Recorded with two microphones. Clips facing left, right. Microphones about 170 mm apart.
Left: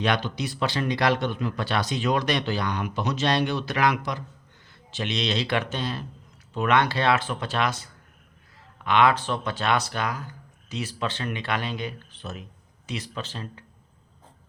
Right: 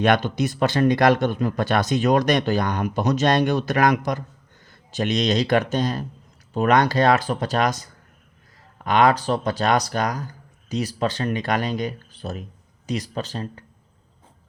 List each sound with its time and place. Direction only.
0.0 s speech: 50° right (ahead or behind)